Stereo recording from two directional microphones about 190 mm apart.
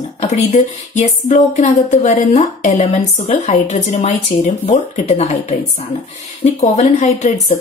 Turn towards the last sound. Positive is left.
turn(degrees=40)  # may be behind; listen again after turning